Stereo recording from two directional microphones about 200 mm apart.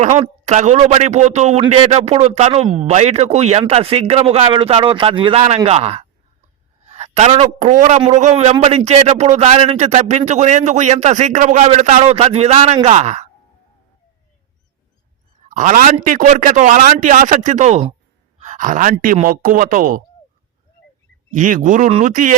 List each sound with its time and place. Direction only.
0.0 s speech: 35° right (ahead or behind)
6.8 s a sound: 35° right (ahead or behind)
7.6 s speech: 40° right (ahead or behind)
15.4 s speech: 40° right (ahead or behind)
21.3 s speech: 40° right (ahead or behind)